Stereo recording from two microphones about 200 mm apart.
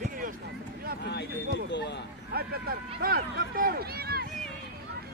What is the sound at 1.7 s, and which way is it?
Speech, 60° left (ahead or behind).